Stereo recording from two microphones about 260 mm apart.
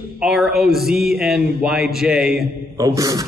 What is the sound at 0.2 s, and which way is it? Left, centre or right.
A man's voice, centre.